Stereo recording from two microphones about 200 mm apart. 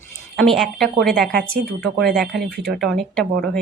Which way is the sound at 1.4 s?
50° right (ahead or behind).